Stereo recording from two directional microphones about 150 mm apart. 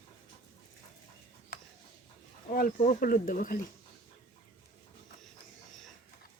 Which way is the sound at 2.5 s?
70° left (ahead or behind).